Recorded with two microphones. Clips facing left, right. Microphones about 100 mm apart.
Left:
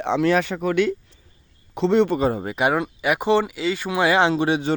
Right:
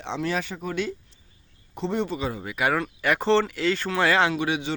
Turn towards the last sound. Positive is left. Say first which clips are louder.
# left 5 dB
turn(degrees=30)  # may be behind; listen again after turning